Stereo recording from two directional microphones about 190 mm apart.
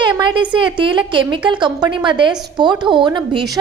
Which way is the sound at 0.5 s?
25° right (ahead or behind).